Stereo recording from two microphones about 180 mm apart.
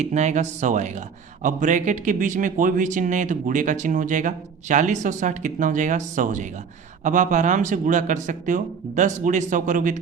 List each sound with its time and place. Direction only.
0.0 s a man's voice: 40° right (ahead or behind)